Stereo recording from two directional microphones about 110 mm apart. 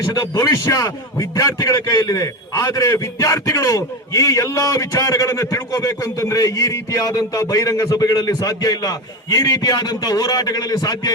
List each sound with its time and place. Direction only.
0.0 s a man's voice: 35° left (ahead or behind)